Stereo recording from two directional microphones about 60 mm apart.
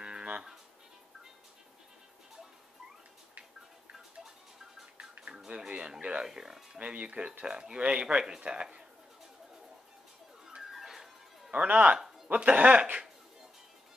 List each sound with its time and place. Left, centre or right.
0.0 s music: centre
3.9 s music: centre
5.2 s speech: centre
10.4 s music: centre
11.5 s speech: right